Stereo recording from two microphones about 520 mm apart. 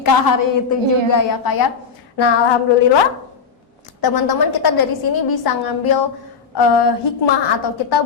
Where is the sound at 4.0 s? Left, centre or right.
Left.